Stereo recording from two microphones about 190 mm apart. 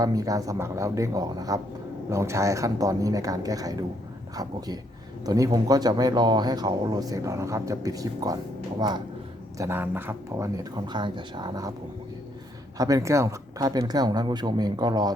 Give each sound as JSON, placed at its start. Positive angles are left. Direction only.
{"t": 0.0, "sound": "speech", "side_deg": -20}
{"t": 9.6, "sound": "speech", "side_deg": -10}
{"t": 12.7, "sound": "speech", "side_deg": -20}